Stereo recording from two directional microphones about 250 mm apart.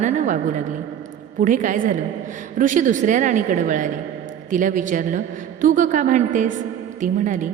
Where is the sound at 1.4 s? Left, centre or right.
Right.